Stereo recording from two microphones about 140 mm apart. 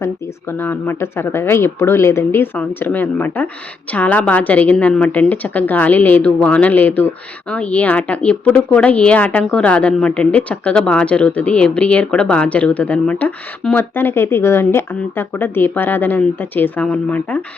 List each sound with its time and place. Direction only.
0.5 s speech: 15° left (ahead or behind)